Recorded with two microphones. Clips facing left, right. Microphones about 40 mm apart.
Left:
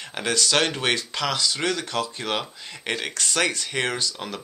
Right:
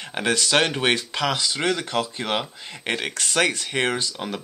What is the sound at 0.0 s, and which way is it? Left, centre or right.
Speech, right.